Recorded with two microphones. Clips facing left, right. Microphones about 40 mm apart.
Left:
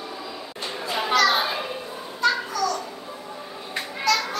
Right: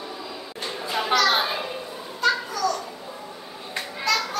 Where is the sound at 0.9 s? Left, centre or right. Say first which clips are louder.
Left 1 dB; centre.